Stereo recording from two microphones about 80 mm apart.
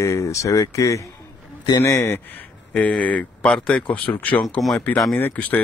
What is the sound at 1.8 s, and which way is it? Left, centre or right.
Speech, left.